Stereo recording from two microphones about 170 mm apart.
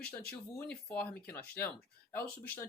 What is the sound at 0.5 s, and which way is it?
Speech, 10° left (ahead or behind).